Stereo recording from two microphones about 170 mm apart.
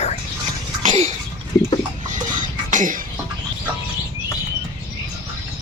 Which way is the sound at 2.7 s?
50° right (ahead or behind).